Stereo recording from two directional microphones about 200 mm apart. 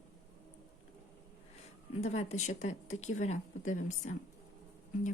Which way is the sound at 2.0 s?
35° left (ahead or behind).